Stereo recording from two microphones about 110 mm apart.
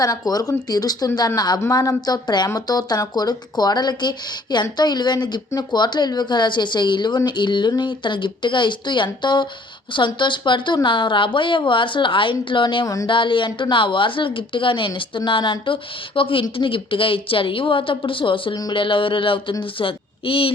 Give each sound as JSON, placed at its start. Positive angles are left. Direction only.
{"t": 0.0, "sound": "a woman's voice", "side_deg": 35}
{"t": 12.8, "sound": "speech", "side_deg": 30}
{"t": 13.1, "sound": "a woman's voice", "side_deg": 50}